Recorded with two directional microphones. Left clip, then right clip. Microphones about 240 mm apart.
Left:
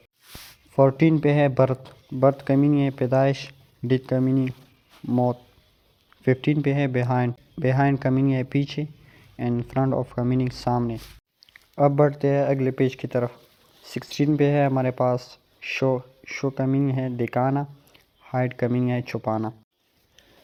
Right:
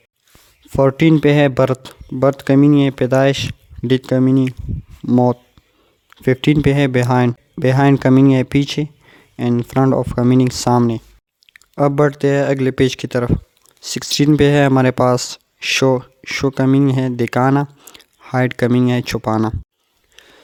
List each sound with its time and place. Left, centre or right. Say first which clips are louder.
0.8 s speech: right 6 dB; right